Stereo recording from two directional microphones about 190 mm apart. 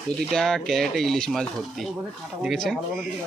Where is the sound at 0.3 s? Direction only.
Centre (ahead or behind).